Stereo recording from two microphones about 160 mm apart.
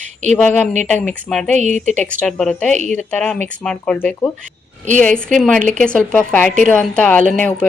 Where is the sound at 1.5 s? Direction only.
50° right (ahead or behind).